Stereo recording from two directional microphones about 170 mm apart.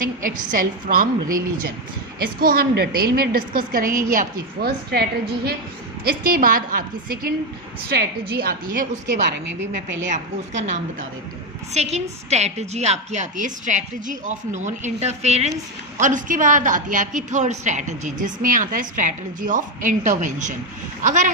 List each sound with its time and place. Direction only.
0.0 s a woman's voice: 55° right (ahead or behind)
2.1 s a woman's voice: 65° right (ahead or behind)
6.1 s a woman's voice: 60° right (ahead or behind)
7.9 s a woman's voice: 75° right (ahead or behind); by 9.0 s 55° right (ahead or behind)
10.1 s a woman's voice: 45° right (ahead or behind)